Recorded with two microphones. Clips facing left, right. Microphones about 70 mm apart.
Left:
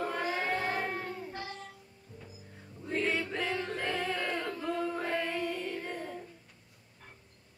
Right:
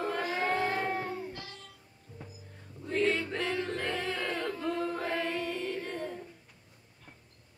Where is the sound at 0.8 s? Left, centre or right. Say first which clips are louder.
Right 3 dB; centre.